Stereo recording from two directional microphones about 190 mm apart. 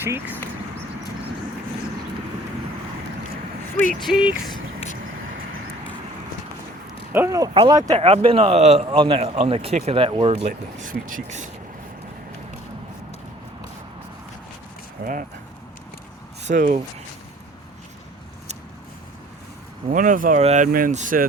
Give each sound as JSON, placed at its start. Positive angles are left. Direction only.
{"t": 0.0, "sound": "speech", "side_deg": -10}
{"t": 4.0, "sound": "speech", "side_deg": -5}
{"t": 7.1, "sound": "speech", "side_deg": -15}
{"t": 7.9, "sound": "a man's voice", "side_deg": -30}
{"t": 10.4, "sound": "speech", "side_deg": -45}
{"t": 15.0, "sound": "speech", "side_deg": -50}
{"t": 16.4, "sound": "speech", "side_deg": -40}
{"t": 19.9, "sound": "speech", "side_deg": -45}